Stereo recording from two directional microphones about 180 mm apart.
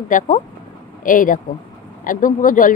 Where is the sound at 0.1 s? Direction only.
45° left (ahead or behind).